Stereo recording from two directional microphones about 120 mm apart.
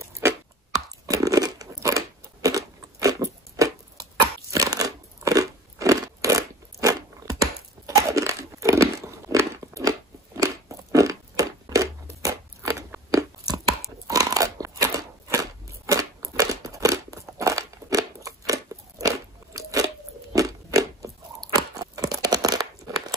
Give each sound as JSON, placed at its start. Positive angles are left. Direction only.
{"t": 1.0, "sound": "crunch", "side_deg": -30}
{"t": 20.3, "sound": "biting", "side_deg": -25}